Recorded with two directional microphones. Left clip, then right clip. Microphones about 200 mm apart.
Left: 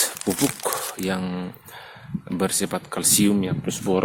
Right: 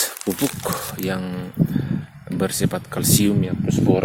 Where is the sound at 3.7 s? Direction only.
15° left (ahead or behind).